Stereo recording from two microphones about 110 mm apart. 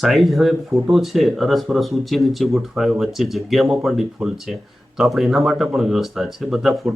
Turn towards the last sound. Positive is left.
turn(degrees=0)  # may be behind; listen again after turning